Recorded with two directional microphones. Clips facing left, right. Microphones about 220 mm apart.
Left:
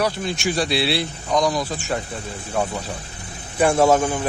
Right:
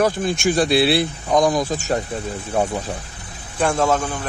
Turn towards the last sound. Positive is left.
turn(degrees=10)  # may be behind; listen again after turning